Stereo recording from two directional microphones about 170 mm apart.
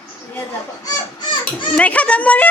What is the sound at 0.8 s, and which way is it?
Speech, 25° left (ahead or behind).